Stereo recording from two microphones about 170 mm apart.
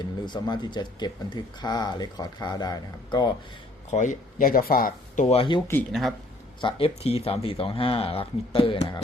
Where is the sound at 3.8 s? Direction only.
45° left (ahead or behind).